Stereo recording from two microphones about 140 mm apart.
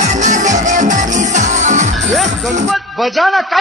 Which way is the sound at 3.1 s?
Centre (ahead or behind).